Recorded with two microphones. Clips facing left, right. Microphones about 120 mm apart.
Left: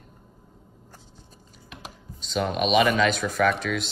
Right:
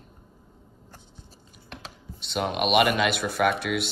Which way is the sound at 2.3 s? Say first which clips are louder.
Left 1 dB; 55° right (ahead or behind).